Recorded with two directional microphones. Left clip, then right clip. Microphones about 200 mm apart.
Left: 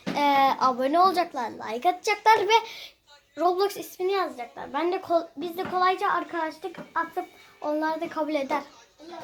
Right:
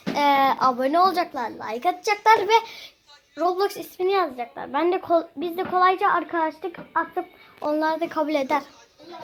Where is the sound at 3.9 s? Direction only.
45° right (ahead or behind).